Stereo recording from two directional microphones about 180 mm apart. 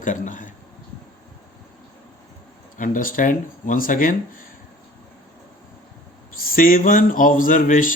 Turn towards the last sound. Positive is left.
turn(degrees=50)  # may be behind; listen again after turning